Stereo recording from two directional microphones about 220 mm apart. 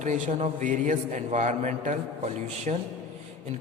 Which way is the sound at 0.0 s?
35° right (ahead or behind).